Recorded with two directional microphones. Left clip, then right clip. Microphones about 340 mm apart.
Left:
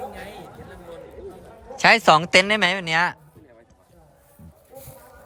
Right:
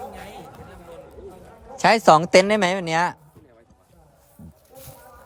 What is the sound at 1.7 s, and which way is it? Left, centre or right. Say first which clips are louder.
Speech: even; centre.